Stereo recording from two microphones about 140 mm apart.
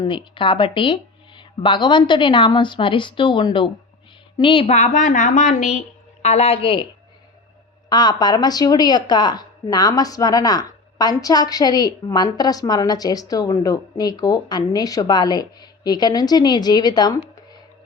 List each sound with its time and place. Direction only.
0.0 s a woman's voice: 35° left (ahead or behind)
4.6 s a woman's voice: 55° left (ahead or behind); by 6.8 s 40° left (ahead or behind)
7.9 s speech: 30° left (ahead or behind)